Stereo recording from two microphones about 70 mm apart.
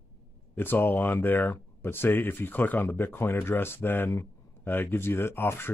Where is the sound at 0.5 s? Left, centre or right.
Left.